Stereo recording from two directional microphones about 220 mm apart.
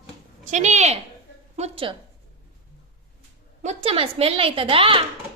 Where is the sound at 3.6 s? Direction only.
30° right (ahead or behind).